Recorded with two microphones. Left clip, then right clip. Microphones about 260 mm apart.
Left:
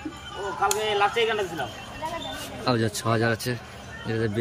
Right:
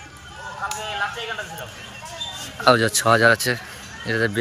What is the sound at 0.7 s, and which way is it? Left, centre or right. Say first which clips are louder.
Speech: left 3 dB; left.